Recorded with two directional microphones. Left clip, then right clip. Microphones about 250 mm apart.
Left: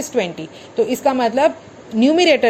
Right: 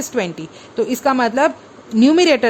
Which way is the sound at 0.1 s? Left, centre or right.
Centre.